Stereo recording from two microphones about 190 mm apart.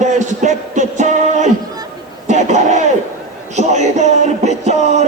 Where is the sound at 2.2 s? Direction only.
40° right (ahead or behind).